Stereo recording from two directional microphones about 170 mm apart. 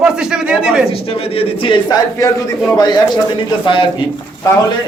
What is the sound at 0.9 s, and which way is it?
A man's voice, 35° left (ahead or behind).